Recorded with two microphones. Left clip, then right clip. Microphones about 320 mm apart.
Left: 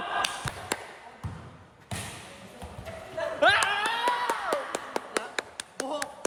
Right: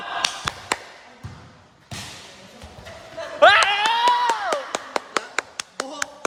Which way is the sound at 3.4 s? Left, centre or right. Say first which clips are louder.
Right 9 dB; right.